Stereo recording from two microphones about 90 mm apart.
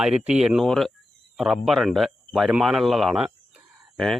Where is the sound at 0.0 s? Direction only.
5° right (ahead or behind).